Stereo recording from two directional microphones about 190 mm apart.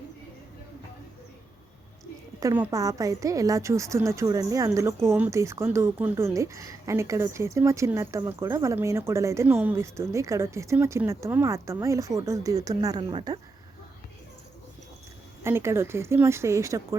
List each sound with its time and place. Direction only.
2.4 s a woman's voice: 15° right (ahead or behind)
15.4 s a woman's voice: 15° right (ahead or behind)